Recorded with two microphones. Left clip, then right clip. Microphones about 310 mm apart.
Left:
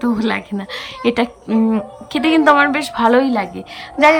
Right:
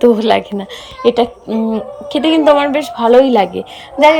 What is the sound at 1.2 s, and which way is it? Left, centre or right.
Speech, left.